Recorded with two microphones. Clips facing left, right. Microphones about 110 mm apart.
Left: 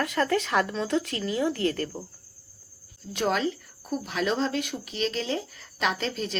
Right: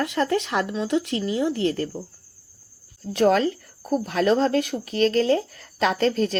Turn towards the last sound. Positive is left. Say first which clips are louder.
# right 7 dB
turn(degrees=-50)  # may be behind; listen again after turning